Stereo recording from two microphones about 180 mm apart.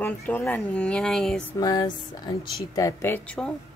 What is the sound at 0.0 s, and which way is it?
Speech, 10° left (ahead or behind).